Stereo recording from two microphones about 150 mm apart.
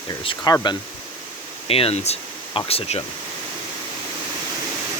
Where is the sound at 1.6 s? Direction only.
40° left (ahead or behind).